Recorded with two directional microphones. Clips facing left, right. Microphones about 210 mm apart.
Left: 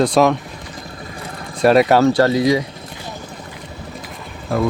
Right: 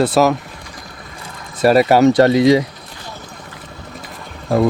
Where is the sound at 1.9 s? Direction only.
20° right (ahead or behind).